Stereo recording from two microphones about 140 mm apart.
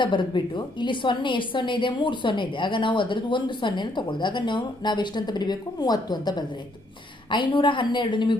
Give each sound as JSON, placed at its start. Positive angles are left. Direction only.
{"t": 0.0, "sound": "a woman's voice", "side_deg": 35}